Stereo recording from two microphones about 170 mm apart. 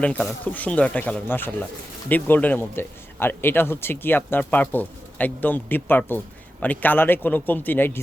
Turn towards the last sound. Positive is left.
turn(degrees=10)  # may be behind; listen again after turning